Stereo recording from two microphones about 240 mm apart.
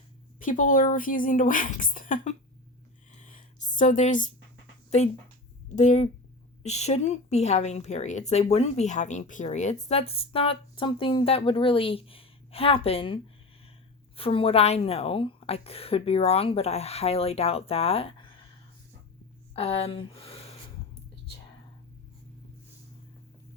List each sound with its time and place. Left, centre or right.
0.3 s speech: left
3.2 s a sound: left
5.0 s a woman's voice: left
14.2 s a woman's voice: left
19.5 s speech: left